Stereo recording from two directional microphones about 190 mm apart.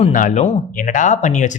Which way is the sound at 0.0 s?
40° left (ahead or behind).